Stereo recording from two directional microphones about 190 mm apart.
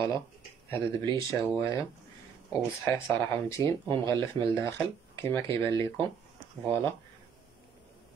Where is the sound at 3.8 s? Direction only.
25° right (ahead or behind).